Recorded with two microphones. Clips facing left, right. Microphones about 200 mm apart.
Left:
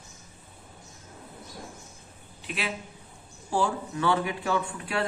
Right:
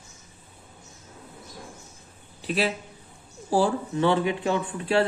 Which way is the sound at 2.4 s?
35° right (ahead or behind).